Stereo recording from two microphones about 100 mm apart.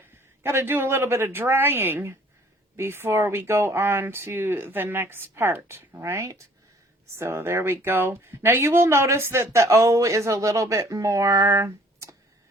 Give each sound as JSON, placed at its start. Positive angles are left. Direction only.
{"t": 0.4, "sound": "speech", "side_deg": -25}